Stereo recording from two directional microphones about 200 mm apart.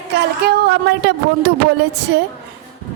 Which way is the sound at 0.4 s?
55° right (ahead or behind).